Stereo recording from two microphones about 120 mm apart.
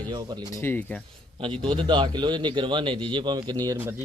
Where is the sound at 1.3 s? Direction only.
45° right (ahead or behind).